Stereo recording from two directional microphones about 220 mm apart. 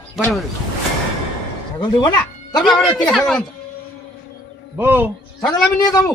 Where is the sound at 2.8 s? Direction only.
Centre (ahead or behind).